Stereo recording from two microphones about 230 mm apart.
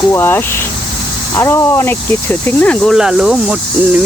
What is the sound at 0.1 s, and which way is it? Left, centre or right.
Speech, centre.